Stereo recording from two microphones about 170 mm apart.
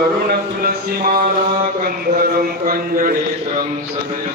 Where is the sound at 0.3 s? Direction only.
65° right (ahead or behind).